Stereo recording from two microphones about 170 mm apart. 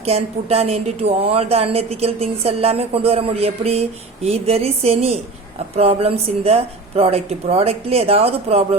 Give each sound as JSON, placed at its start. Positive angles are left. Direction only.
{"t": 0.0, "sound": "speech", "side_deg": -40}